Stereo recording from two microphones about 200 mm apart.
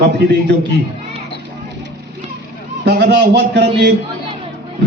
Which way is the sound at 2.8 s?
55° right (ahead or behind).